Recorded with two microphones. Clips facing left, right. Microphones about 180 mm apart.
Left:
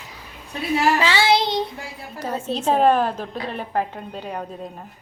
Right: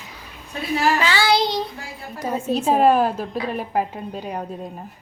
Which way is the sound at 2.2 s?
10° right (ahead or behind).